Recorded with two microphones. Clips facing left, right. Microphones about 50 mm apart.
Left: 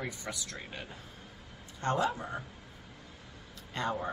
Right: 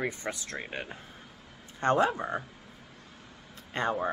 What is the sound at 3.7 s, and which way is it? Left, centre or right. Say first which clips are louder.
Speech: right 4 dB; right.